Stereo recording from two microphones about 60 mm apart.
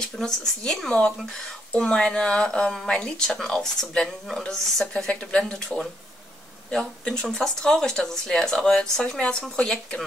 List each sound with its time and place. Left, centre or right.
0.2 s speech: centre